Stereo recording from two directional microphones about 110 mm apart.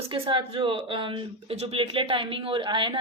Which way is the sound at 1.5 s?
60° right (ahead or behind).